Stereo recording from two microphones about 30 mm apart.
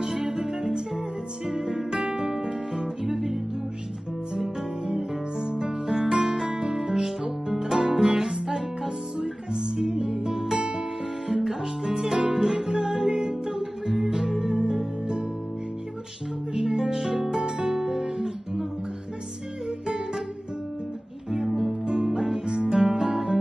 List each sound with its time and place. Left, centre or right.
0.0 s music: centre
2.4 s guitar: centre
5.4 s music: right
16.6 s music: centre
17.4 s guitar: centre
21.3 s music: centre
21.8 s music: right
22.7 s guitar: centre